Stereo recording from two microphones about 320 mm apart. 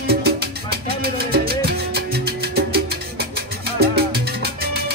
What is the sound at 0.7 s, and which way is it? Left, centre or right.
Music, right.